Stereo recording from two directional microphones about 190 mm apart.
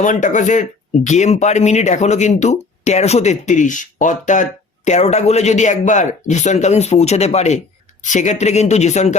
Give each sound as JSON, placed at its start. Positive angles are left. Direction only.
{"t": 0.0, "sound": "speech", "side_deg": 40}